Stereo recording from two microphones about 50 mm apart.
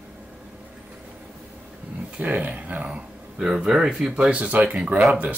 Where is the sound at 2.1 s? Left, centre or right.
Right.